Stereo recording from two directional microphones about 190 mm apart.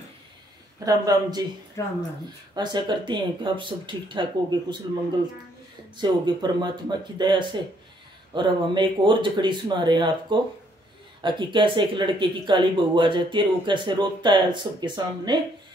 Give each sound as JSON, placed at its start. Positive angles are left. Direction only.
{"t": 0.8, "sound": "speech", "side_deg": -20}
{"t": 1.8, "sound": "speech", "side_deg": 15}
{"t": 2.5, "sound": "speech", "side_deg": -20}
{"t": 5.9, "sound": "speech", "side_deg": -25}